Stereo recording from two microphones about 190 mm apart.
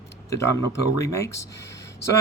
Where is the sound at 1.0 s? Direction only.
15° left (ahead or behind).